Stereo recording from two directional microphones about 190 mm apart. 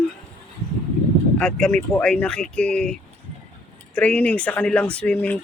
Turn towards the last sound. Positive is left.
turn(degrees=5)  # may be behind; listen again after turning